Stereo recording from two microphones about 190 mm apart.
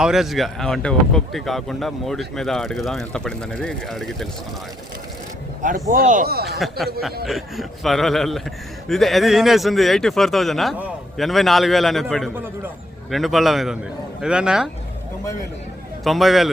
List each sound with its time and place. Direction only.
0.0 s speech: centre (ahead or behind)
5.9 s speech: 45° right (ahead or behind)
6.6 s speech: centre (ahead or behind)
16.0 s speech: centre (ahead or behind)